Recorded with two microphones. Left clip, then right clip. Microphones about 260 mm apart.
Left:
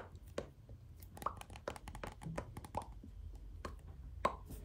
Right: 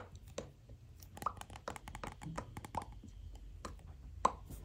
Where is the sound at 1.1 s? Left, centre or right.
Centre.